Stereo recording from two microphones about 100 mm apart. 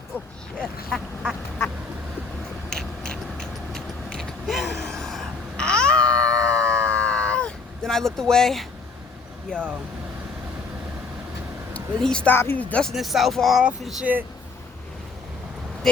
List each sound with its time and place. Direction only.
0.6 s duck: centre (ahead or behind)
2.6 s a sound: 5° left (ahead or behind)
9.5 s speech: 10° left (ahead or behind)
11.9 s speech: 10° left (ahead or behind)
12.3 s speech: 20° left (ahead or behind)
12.9 s speech: centre (ahead or behind)